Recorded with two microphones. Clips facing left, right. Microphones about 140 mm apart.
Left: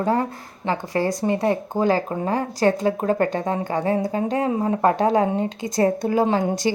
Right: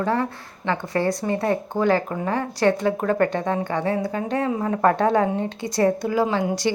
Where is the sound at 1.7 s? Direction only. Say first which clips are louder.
Even; 35° left (ahead or behind).